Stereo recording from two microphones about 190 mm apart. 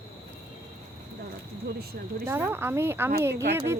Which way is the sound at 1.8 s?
55° right (ahead or behind).